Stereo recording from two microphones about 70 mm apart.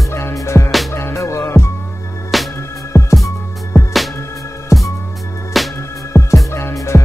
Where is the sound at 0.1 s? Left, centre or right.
Left.